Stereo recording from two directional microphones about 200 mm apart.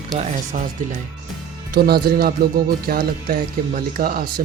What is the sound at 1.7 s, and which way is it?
Speech, 50° right (ahead or behind).